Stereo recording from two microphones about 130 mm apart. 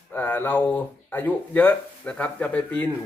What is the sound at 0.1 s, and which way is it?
Speech, 15° left (ahead or behind).